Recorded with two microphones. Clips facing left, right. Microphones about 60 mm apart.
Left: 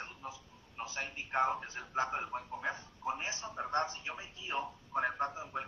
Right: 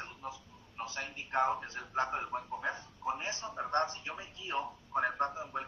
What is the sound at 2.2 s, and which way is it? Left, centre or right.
Speech, right.